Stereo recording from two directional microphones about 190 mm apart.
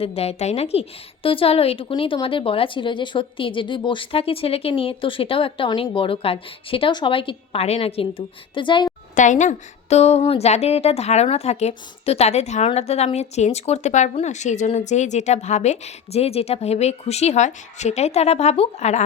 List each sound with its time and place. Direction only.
0.0 s a woman's voice: 35° left (ahead or behind)
9.1 s speech: 40° left (ahead or behind)